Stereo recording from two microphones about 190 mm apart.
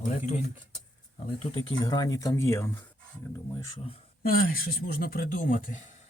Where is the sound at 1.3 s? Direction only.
25° left (ahead or behind).